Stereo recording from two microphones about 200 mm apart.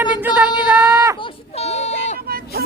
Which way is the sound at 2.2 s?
50° right (ahead or behind).